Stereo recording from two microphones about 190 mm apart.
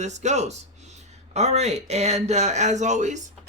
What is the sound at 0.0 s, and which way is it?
Speech, 35° right (ahead or behind).